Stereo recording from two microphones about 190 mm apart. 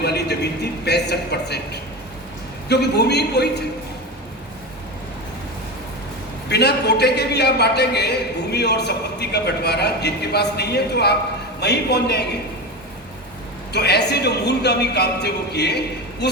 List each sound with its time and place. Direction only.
0.0 s a man's voice: 60° left (ahead or behind)
6.5 s a man's voice: 60° left (ahead or behind)
13.7 s a man's voice: 60° left (ahead or behind)